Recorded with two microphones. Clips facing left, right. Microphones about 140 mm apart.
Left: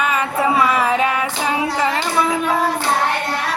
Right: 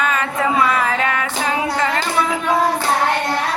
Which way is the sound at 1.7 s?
15° left (ahead or behind).